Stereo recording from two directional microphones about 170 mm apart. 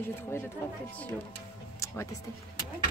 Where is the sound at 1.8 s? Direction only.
15° left (ahead or behind).